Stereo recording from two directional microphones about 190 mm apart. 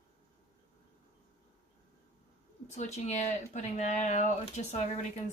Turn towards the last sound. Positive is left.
turn(degrees=35)  # may be behind; listen again after turning